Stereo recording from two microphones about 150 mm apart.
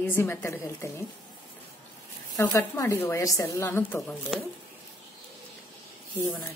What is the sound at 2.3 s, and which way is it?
Speech, 20° left (ahead or behind).